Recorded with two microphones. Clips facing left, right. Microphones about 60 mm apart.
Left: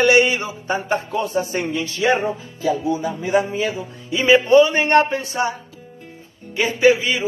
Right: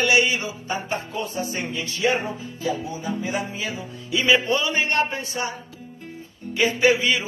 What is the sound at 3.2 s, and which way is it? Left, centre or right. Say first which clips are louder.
Speech: left 10 dB; left.